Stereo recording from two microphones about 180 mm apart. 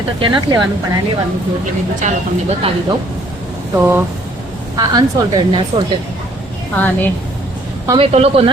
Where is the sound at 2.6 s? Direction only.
30° right (ahead or behind).